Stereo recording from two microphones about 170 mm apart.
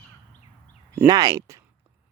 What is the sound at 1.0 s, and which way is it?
Speech, 20° right (ahead or behind).